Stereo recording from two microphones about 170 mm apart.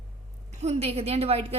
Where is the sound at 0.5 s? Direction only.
40° right (ahead or behind).